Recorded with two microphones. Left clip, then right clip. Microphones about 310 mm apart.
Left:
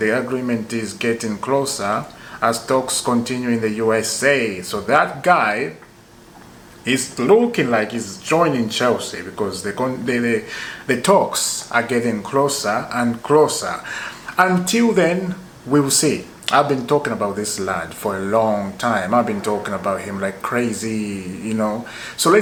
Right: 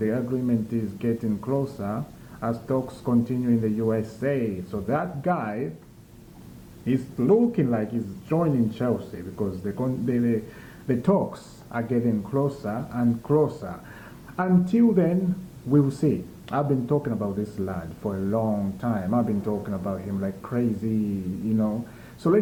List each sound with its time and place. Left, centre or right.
0.0 s speech: centre
3.0 s speech: centre
3.2 s speech: centre
6.8 s speech: centre